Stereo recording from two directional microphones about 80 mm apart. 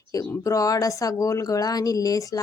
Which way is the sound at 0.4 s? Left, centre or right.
Left.